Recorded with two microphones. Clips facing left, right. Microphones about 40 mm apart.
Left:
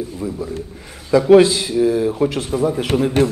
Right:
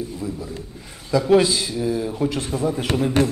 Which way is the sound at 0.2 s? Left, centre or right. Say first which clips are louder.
Left 5 dB; centre.